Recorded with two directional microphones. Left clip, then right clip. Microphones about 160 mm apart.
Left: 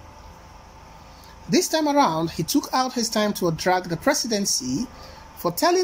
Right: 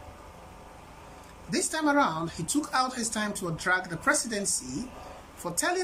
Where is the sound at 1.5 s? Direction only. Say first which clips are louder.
Left 6 dB; 15° left (ahead or behind).